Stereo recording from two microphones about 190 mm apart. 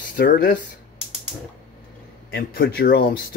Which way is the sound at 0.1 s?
50° left (ahead or behind).